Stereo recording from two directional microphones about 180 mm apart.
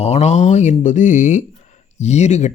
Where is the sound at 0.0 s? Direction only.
35° left (ahead or behind).